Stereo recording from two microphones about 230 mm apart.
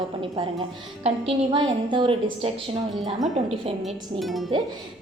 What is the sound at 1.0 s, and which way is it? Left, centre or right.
A woman's voice, right.